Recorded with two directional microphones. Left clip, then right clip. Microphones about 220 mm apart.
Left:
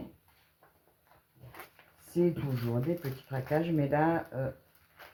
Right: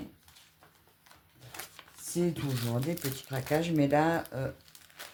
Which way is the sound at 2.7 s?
30° right (ahead or behind).